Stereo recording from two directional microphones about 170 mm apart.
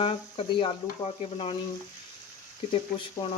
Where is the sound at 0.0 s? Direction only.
30° left (ahead or behind).